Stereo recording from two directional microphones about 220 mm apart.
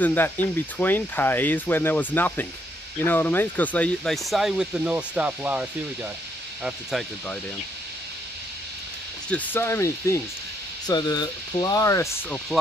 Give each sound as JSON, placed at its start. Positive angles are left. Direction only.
{"t": 0.0, "sound": "speech", "side_deg": 10}
{"t": 9.3, "sound": "speech", "side_deg": 10}